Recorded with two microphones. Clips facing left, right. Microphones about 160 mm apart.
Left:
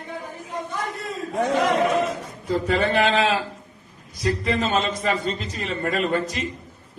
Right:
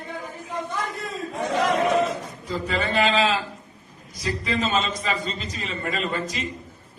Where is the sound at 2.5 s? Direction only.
60° left (ahead or behind).